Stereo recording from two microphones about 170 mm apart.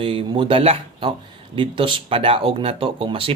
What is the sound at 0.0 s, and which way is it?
Speech, 30° right (ahead or behind).